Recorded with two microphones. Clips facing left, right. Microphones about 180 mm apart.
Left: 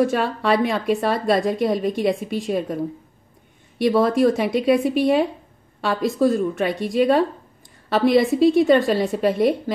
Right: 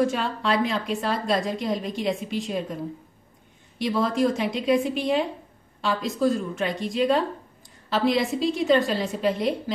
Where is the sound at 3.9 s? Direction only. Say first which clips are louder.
Left 6 dB; 60° left (ahead or behind).